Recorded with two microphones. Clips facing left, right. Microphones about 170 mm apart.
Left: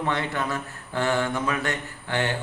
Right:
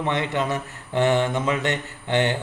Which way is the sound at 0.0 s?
20° right (ahead or behind).